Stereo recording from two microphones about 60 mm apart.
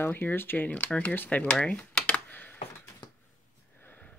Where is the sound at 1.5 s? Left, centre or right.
Centre.